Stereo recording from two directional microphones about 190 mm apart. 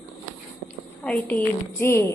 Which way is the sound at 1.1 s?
5° left (ahead or behind).